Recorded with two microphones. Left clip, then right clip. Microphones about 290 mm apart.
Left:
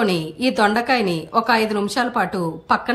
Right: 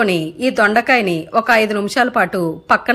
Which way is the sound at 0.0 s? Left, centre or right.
Centre.